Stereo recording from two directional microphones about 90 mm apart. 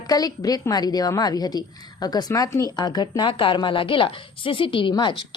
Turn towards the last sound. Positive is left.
turn(degrees=55)  # may be behind; listen again after turning